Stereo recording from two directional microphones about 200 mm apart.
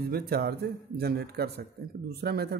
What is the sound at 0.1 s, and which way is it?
A man's voice, 50° right (ahead or behind).